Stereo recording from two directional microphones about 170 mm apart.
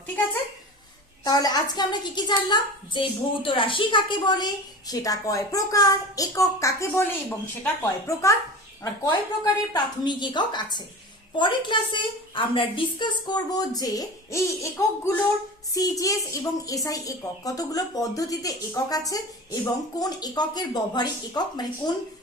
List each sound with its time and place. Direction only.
1.2 s a woman's voice: 25° left (ahead or behind)